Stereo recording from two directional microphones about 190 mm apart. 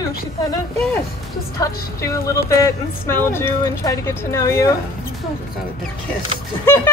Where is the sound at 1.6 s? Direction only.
15° left (ahead or behind).